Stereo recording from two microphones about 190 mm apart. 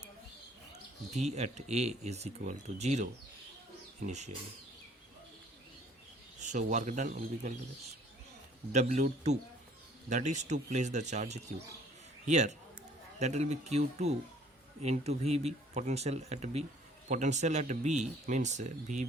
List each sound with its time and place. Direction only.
1.1 s speech: 35° right (ahead or behind)
6.4 s speech: 40° right (ahead or behind)
8.7 s speech: 35° right (ahead or behind)
10.1 s speech: 40° right (ahead or behind)